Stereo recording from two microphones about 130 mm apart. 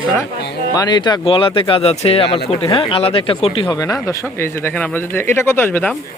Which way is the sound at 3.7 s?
25° left (ahead or behind).